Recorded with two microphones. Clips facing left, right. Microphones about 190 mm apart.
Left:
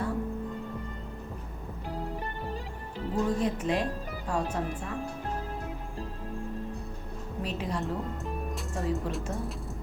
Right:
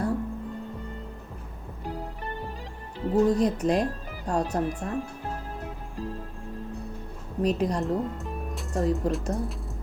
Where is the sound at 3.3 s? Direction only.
40° right (ahead or behind).